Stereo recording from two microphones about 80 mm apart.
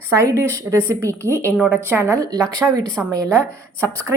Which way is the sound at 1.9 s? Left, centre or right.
Right.